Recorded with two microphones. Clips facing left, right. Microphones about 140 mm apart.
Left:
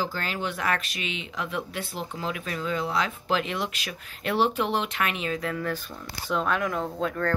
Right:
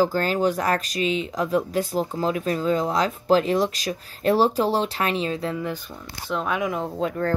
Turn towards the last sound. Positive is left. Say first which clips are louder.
# right 3 dB
turn(degrees=-10)  # may be behind; listen again after turning